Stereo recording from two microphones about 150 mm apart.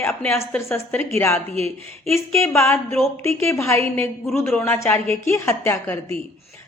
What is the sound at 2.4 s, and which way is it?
A woman's voice, 20° left (ahead or behind).